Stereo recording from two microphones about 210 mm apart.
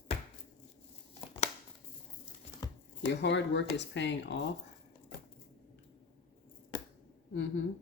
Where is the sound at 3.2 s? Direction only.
55° left (ahead or behind).